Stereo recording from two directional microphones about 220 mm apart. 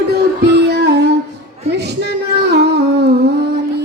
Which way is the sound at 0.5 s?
50° right (ahead or behind).